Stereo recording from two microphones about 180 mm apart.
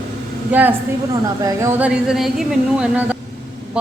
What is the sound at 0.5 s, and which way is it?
Speech, 10° right (ahead or behind).